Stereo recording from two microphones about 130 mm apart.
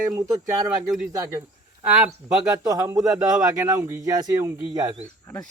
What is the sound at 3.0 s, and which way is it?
Speech, 5° right (ahead or behind).